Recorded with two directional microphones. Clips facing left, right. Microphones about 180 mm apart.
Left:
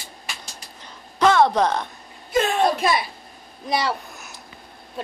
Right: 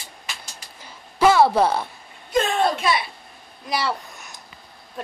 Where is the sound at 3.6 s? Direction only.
20° left (ahead or behind).